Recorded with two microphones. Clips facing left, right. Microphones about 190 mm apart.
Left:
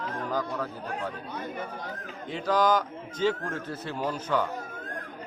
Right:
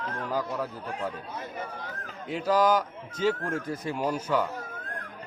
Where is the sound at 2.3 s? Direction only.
10° right (ahead or behind).